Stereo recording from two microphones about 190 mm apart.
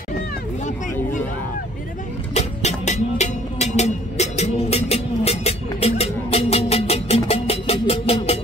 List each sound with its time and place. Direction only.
2.3 s music: 35° left (ahead or behind)